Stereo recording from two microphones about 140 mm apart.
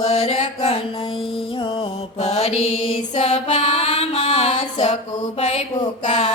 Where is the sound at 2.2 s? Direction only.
45° left (ahead or behind).